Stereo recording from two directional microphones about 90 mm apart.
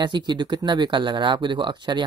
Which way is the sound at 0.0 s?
55° right (ahead or behind).